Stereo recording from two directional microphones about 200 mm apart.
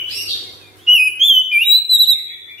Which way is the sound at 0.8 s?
Centre (ahead or behind).